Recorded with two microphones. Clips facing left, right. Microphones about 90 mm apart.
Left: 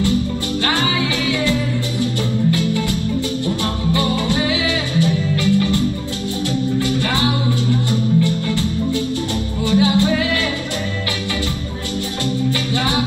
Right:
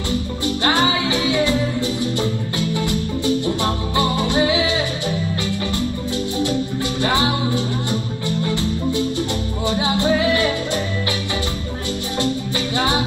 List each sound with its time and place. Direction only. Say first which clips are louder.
0.7 s music: right 2 dB; 20° right (ahead or behind)
7.0 s music: even; 20° right (ahead or behind)
9.7 s music: left 3 dB; 20° right (ahead or behind)